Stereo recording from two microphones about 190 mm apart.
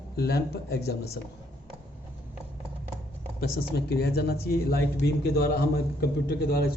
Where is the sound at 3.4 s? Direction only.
60° left (ahead or behind).